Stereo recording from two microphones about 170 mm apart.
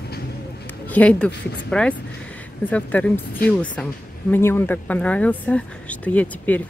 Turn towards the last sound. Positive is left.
turn(degrees=10)  # may be behind; listen again after turning